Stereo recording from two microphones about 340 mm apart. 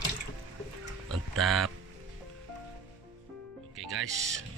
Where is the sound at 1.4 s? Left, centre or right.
Centre.